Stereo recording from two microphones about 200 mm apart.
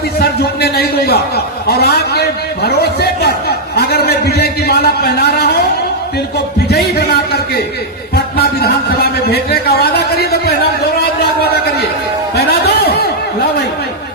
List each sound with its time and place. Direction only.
0.2 s a man's voice: 50° left (ahead or behind)
6.7 s a man's voice: 55° left (ahead or behind)
12.6 s snicker: 55° left (ahead or behind)